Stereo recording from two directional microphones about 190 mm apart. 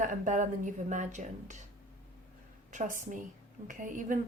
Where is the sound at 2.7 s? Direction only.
40° right (ahead or behind).